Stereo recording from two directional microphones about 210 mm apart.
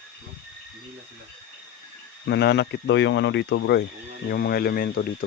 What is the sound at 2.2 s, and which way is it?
Speech, 55° left (ahead or behind).